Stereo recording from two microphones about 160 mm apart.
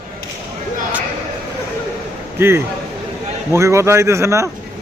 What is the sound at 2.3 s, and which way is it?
A man's voice, 15° right (ahead or behind).